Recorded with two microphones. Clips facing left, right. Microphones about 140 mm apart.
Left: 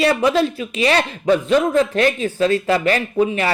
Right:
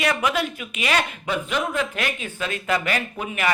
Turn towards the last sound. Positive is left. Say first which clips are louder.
# left 8 dB
turn(degrees=30)  # may be behind; listen again after turning